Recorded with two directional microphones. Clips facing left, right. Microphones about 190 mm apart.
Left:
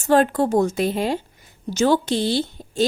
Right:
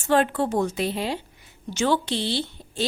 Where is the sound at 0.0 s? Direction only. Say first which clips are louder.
Left 4 dB; 40° left (ahead or behind).